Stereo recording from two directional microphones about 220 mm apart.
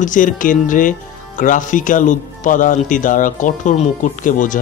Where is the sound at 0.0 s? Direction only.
35° left (ahead or behind).